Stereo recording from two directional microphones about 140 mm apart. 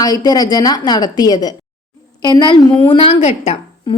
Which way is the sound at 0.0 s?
25° left (ahead or behind).